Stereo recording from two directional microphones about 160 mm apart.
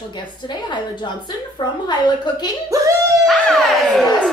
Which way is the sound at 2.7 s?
20° right (ahead or behind).